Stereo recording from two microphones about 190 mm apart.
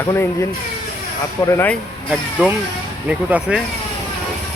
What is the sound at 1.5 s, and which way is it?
Speech, 10° left (ahead or behind).